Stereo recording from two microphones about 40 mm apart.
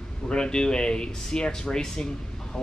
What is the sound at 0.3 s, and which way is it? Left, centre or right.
Speech, centre.